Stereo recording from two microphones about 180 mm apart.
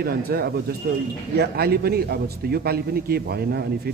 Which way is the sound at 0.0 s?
60° right (ahead or behind).